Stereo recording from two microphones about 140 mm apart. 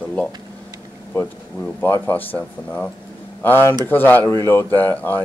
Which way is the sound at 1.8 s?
15° left (ahead or behind).